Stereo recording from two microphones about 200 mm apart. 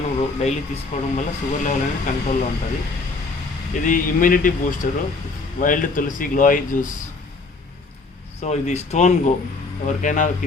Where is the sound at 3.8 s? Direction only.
40° left (ahead or behind).